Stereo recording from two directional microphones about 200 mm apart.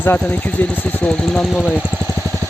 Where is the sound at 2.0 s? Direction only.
15° left (ahead or behind).